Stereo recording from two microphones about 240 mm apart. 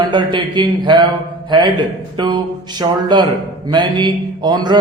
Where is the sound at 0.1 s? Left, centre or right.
Centre.